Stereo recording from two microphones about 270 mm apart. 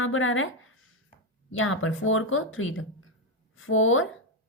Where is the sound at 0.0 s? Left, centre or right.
Left.